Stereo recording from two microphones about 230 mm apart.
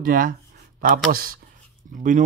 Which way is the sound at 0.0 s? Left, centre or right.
Right.